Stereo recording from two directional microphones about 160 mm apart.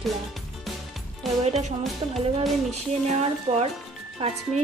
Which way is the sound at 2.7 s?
40° right (ahead or behind).